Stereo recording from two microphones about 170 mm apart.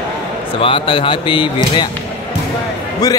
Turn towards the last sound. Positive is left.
turn(degrees=20)  # may be behind; listen again after turning